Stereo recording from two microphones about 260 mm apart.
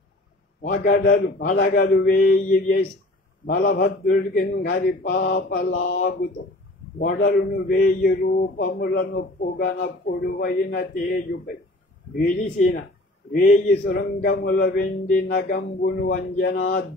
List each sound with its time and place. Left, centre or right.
0.7 s music: left
7.0 s music: left
12.2 s music: left